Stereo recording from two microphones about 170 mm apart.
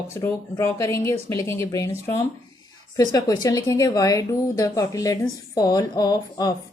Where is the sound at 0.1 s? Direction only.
15° left (ahead or behind).